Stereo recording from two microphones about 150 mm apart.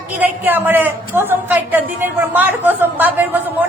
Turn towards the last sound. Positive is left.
turn(degrees=-10)  # may be behind; listen again after turning